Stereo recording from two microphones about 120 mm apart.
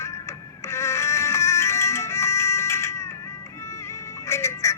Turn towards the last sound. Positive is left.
turn(degrees=25)  # may be behind; listen again after turning